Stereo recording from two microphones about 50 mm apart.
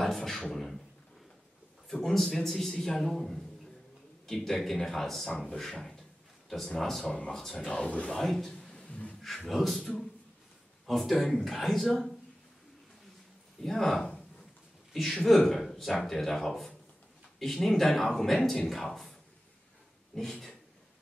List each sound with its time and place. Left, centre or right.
0.0 s beatboxing: centre
1.9 s speech: centre
7.1 s speech: left
8.2 s speech: centre
8.7 s a sound: left
9.2 s speech: centre
13.7 s speech: centre
20.2 s speech: centre